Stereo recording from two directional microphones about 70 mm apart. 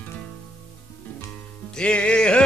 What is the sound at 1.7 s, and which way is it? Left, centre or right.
Music, centre.